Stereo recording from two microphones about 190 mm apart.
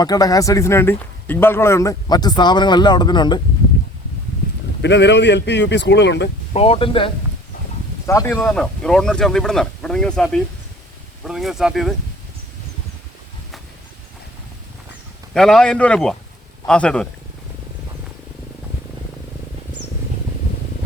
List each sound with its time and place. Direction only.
0.0 s speech: 20° left (ahead or behind)
4.8 s speech: 65° left (ahead or behind)
6.5 s speech: 30° left (ahead or behind)
8.0 s speech: 15° left (ahead or behind); by 11.9 s centre (ahead or behind)
15.3 s speech: centre (ahead or behind)